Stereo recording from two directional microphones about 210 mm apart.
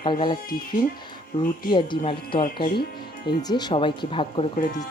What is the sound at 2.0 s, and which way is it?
Speech, 25° left (ahead or behind).